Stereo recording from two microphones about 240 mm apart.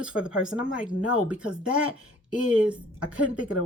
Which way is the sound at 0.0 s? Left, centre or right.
Centre.